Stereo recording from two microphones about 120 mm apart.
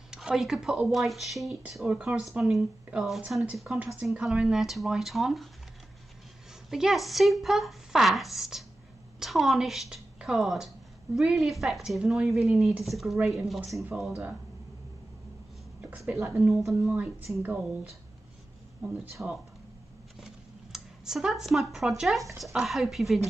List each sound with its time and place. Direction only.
0.1 s a woman's voice: 5° right (ahead or behind)
6.7 s a woman's voice: centre (ahead or behind)
16.3 s a woman's voice: 5° right (ahead or behind)
16.9 s speech: 15° right (ahead or behind)
19.2 s speech: 10° right (ahead or behind)
20.2 s computer keyboard: 5° right (ahead or behind)
22.4 s a woman's voice: centre (ahead or behind)